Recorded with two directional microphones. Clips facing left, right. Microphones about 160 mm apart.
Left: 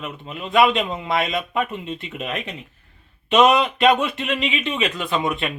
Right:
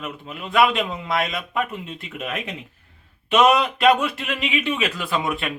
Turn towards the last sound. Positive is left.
turn(degrees=-5)  # may be behind; listen again after turning